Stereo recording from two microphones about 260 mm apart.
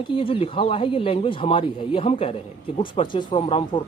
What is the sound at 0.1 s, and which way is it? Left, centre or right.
Speech, centre.